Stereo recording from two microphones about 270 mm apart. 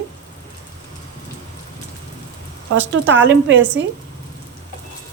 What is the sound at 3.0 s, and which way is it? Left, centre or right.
Speech, right.